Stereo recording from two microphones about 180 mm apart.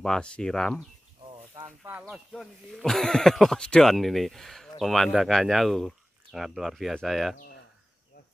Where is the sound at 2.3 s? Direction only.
Centre (ahead or behind).